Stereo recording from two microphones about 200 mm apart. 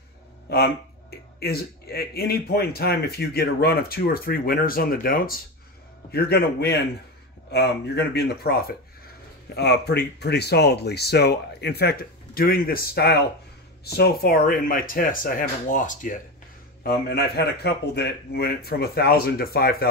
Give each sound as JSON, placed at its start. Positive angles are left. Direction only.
{"t": 0.5, "sound": "speech", "side_deg": 55}
{"t": 16.8, "sound": "speech", "side_deg": 50}